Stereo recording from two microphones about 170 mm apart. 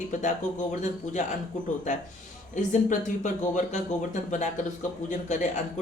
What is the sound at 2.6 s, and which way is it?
Speech, 50° left (ahead or behind).